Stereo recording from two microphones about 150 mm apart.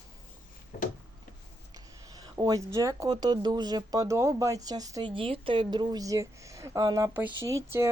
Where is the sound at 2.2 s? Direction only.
25° right (ahead or behind).